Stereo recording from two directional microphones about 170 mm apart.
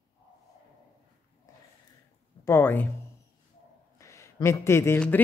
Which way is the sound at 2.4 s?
15° left (ahead or behind).